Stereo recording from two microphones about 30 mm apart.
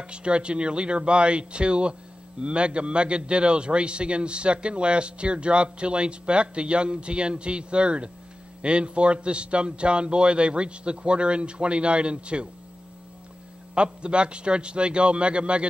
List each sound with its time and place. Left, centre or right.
0.0 s a man's voice: right
13.7 s a man's voice: right